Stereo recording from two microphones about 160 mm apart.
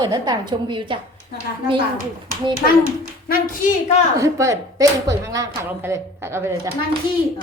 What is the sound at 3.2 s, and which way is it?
Speech, 65° left (ahead or behind).